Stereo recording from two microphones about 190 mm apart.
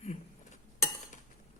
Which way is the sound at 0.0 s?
35° left (ahead or behind).